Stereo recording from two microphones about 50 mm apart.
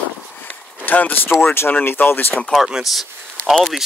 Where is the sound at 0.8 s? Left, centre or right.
Left.